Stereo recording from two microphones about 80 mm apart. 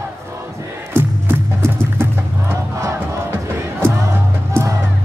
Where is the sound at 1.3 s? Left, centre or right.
Right.